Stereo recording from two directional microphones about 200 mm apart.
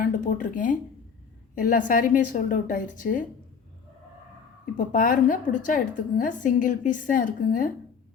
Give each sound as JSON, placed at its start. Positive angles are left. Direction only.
{"t": 0.0, "sound": "a woman's voice", "side_deg": 45}
{"t": 4.9, "sound": "a woman's voice", "side_deg": 45}